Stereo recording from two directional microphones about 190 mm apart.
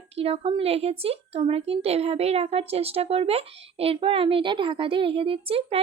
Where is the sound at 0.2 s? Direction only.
30° right (ahead or behind).